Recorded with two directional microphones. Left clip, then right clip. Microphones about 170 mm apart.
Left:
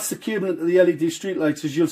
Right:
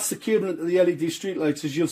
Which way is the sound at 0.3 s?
25° right (ahead or behind).